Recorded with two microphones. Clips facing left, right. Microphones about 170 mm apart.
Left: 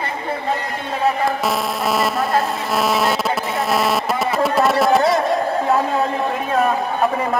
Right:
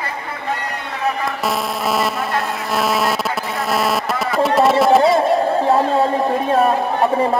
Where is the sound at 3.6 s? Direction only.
Centre (ahead or behind).